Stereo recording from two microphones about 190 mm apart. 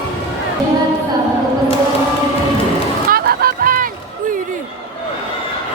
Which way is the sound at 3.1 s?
50° right (ahead or behind).